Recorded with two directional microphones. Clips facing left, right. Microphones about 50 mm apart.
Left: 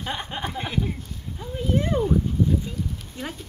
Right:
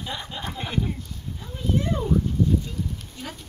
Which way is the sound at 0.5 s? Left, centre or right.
Centre.